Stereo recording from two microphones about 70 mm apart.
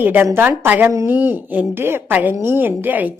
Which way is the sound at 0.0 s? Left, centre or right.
Right.